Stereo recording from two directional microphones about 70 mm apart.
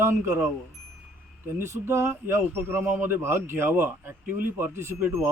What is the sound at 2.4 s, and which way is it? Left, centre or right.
Speech, right.